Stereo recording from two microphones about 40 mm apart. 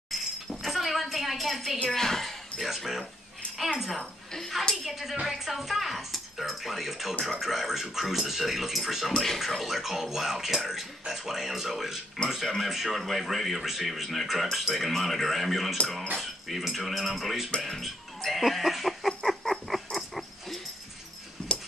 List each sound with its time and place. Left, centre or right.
0.1 s a sound: centre
1.9 s speech: centre
4.0 s a woman's voice: centre
4.8 s speech: centre
17.6 s music: centre
19.0 s a sound: centre
21.4 s dog: left